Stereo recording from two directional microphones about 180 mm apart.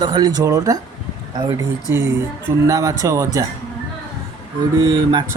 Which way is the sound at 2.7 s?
15° right (ahead or behind).